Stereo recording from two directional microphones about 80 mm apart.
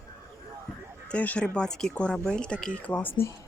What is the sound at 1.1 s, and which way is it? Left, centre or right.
Speech, centre.